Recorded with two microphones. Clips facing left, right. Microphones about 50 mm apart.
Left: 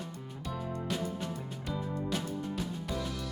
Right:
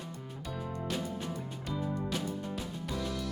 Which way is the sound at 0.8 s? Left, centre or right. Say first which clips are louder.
Even; centre.